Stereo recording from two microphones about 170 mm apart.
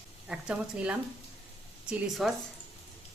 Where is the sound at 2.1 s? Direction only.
Centre (ahead or behind).